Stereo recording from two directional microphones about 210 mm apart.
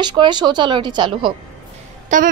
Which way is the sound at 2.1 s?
35° right (ahead or behind).